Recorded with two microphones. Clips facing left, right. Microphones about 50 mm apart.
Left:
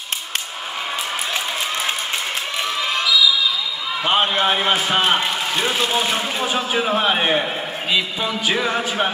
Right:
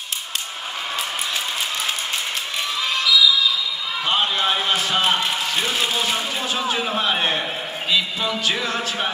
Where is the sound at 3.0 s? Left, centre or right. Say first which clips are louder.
Right 1 dB; centre.